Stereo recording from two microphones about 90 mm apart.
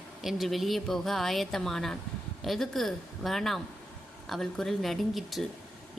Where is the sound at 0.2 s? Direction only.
Centre (ahead or behind).